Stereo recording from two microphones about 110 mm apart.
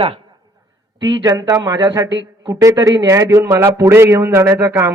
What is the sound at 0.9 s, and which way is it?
A man's voice, 35° right (ahead or behind).